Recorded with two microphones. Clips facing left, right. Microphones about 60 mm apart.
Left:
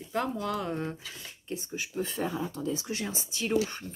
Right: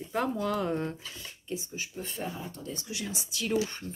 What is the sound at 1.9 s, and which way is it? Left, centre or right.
Speech, left.